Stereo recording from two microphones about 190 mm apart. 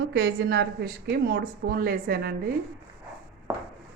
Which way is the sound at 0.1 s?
60° right (ahead or behind).